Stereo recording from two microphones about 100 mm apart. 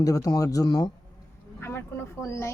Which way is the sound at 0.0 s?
35° left (ahead or behind).